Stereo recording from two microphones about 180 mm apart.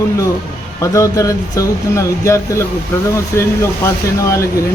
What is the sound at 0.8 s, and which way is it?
Speech, 15° left (ahead or behind).